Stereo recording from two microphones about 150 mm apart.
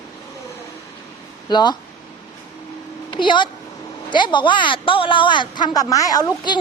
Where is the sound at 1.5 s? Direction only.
30° left (ahead or behind).